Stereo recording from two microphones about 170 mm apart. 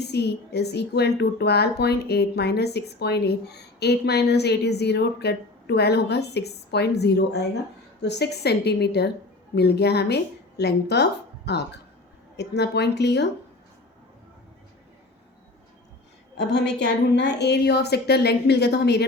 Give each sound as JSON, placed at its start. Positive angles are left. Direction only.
{"t": 0.0, "sound": "a woman's voice", "side_deg": 75}
{"t": 16.4, "sound": "speech", "side_deg": 90}